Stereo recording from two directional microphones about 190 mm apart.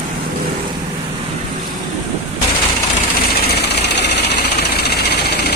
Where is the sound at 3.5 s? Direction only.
60° left (ahead or behind).